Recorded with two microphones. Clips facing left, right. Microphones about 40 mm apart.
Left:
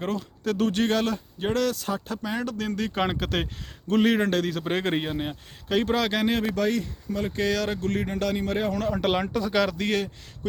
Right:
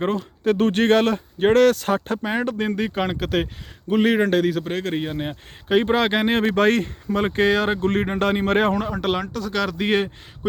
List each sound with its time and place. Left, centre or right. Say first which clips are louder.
0.4 s speech: right 6 dB; right
2.9 s a man's voice: right 3 dB; centre
4.6 s speech: right 1 dB; centre
5.0 s a man's voice: right 2 dB; centre
5.6 s speech: right 5 dB; right
7.4 s speech: right 6 dB; right
8.9 s speech: right 1 dB; centre
9.2 s speech: even; centre
9.7 s a man's voice: right 5 dB; right